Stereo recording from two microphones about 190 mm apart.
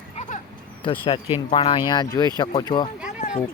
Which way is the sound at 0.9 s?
25° left (ahead or behind).